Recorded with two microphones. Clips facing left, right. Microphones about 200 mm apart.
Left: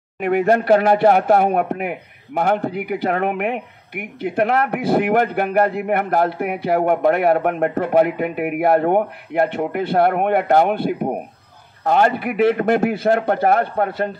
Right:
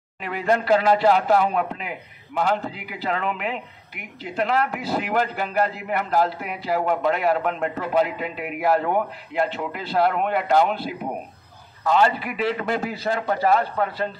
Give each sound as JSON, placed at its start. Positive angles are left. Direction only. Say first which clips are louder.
{"t": 0.2, "sound": "speech", "louder": "left 7 dB", "side_deg": 50}